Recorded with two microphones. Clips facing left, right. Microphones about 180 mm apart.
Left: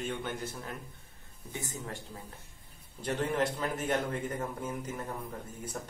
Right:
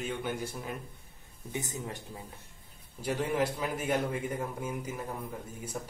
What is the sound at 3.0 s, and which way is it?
A man's voice, 10° right (ahead or behind).